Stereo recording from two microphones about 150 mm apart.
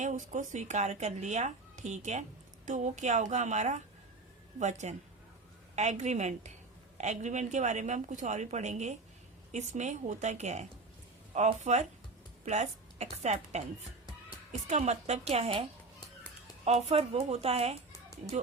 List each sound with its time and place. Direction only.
0.0 s a woman's voice: 55° right (ahead or behind)
16.6 s speech: 45° right (ahead or behind)